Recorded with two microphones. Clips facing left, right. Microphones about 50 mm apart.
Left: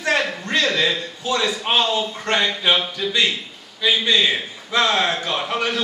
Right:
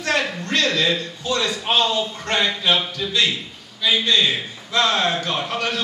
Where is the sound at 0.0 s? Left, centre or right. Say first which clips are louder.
Left 1 dB; centre.